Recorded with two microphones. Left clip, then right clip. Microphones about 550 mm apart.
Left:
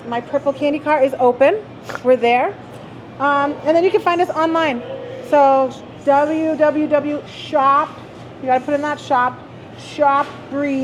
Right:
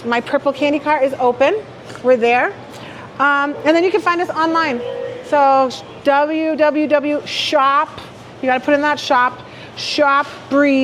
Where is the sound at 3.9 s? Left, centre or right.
Right.